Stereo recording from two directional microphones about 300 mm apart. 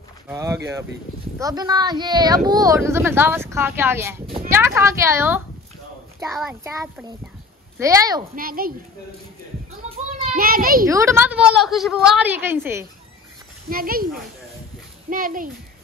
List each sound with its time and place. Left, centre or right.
0.3 s a woman's voice: centre
8.4 s speech: right
9.8 s children playing: right
10.9 s a woman's voice: centre
13.7 s speech: right
15.0 s speech: right